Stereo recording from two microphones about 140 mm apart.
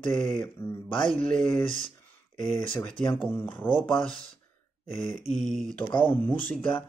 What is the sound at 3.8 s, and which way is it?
Speech, centre (ahead or behind).